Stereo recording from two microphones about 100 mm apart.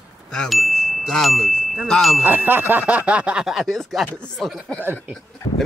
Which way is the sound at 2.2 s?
20° right (ahead or behind).